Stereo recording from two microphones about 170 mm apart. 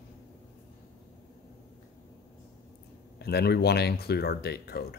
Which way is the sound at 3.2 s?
70° left (ahead or behind).